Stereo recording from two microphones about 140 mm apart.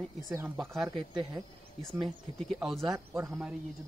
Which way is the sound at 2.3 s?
Centre (ahead or behind).